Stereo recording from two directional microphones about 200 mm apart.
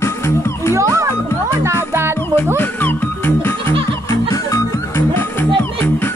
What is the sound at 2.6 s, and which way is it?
Music, 10° left (ahead or behind).